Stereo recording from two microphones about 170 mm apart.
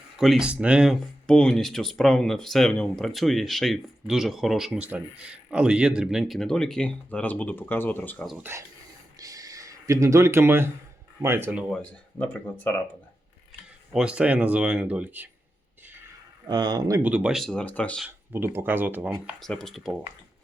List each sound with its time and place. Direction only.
0.2 s speech: centre (ahead or behind)
8.5 s speech: 15° right (ahead or behind)
9.1 s a sound: 20° right (ahead or behind)
11.2 s speech: 15° right (ahead or behind)
11.7 s speech: 5° left (ahead or behind)
13.9 s speech: 5° right (ahead or behind)
16.5 s speech: 25° right (ahead or behind)
17.0 s speech: 10° right (ahead or behind); by 18.0 s 10° left (ahead or behind)
18.0 s speech: 10° right (ahead or behind)
19.4 s speech: centre (ahead or behind)